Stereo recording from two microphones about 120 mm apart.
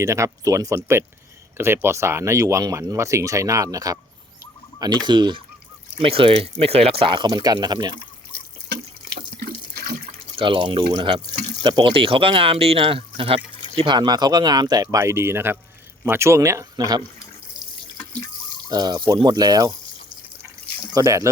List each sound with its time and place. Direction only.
0.0 s speech: 25° right (ahead or behind)
10.3 s speech: 45° right (ahead or behind)
13.8 s speech: 40° right (ahead or behind)
17.9 s water tap: 10° left (ahead or behind)
18.7 s speech: 35° right (ahead or behind)
20.9 s speech: 25° right (ahead or behind)